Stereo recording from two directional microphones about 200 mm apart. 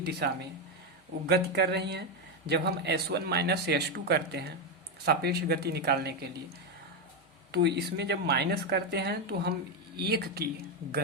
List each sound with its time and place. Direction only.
0.2 s speech: 55° right (ahead or behind)
7.5 s speech: 55° right (ahead or behind)